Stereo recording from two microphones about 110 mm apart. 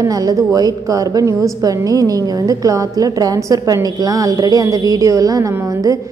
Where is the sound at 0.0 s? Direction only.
35° right (ahead or behind).